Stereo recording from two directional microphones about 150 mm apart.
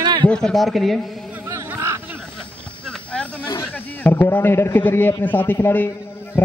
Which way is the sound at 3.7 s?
10° left (ahead or behind).